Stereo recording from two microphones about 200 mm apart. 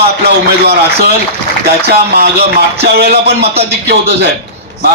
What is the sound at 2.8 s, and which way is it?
Speech, 55° right (ahead or behind).